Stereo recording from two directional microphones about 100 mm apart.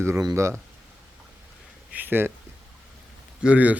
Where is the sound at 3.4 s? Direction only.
15° right (ahead or behind).